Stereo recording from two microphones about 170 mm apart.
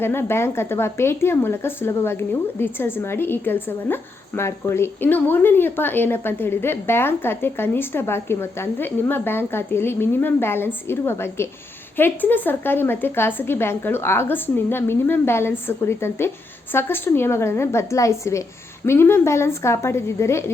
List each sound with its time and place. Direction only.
0.0 s speech: 15° left (ahead or behind)